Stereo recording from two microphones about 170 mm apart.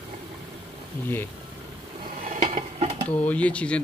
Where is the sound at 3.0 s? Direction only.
10° left (ahead or behind).